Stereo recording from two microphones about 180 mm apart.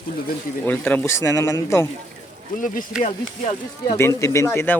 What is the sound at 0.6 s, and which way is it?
Speech, 10° left (ahead or behind).